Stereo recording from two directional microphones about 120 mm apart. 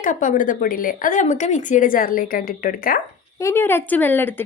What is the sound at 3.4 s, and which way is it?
Speech, 20° left (ahead or behind).